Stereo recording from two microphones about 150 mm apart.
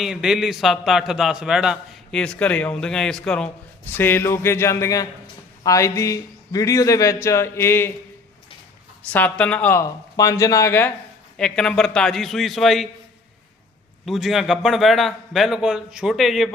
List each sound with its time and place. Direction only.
0.0 s a man's voice: 5° right (ahead or behind); by 7.9 s 15° left (ahead or behind)
9.0 s speech: 10° left (ahead or behind)
11.3 s a man's voice: 5° left (ahead or behind)
14.0 s a man's voice: centre (ahead or behind)